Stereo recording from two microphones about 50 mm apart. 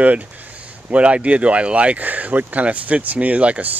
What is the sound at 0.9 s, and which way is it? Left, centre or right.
Speech, right.